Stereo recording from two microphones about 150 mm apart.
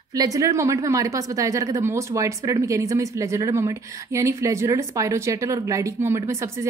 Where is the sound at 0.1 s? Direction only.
25° right (ahead or behind).